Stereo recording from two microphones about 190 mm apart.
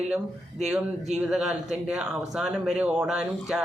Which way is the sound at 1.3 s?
Centre (ahead or behind).